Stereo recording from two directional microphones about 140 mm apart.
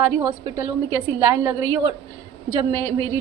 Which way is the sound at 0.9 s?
25° right (ahead or behind).